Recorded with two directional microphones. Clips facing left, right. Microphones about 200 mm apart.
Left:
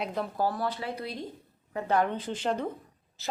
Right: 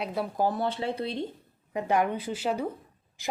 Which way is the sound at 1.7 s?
15° right (ahead or behind).